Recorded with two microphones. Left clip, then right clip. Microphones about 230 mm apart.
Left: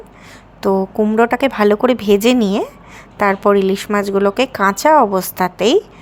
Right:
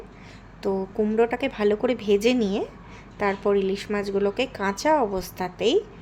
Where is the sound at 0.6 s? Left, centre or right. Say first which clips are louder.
Left 10 dB; centre.